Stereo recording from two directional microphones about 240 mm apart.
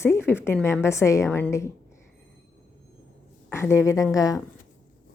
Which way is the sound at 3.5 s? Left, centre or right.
Centre.